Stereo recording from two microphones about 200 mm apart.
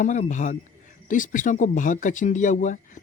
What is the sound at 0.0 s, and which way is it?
Speech, 40° left (ahead or behind).